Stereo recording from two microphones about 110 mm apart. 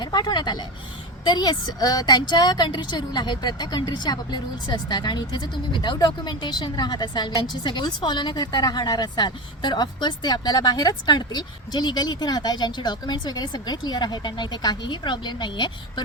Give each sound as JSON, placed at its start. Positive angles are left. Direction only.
{"t": 0.0, "sound": "a woman's voice", "side_deg": 40}